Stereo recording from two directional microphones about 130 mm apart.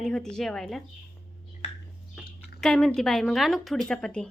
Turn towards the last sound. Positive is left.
turn(degrees=5)  # may be behind; listen again after turning